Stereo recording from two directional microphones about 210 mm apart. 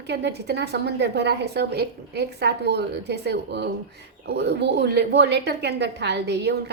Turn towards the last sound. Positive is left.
turn(degrees=-55)  # may be behind; listen again after turning